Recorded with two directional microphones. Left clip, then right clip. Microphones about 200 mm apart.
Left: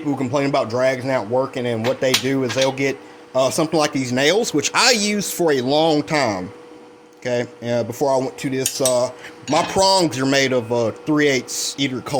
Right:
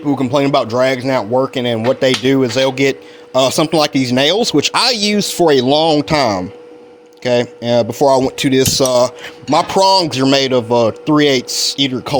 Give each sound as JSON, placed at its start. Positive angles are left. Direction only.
{"t": 0.0, "sound": "speech", "side_deg": -40}